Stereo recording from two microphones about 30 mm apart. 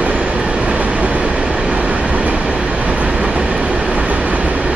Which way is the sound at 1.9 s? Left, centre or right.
Right.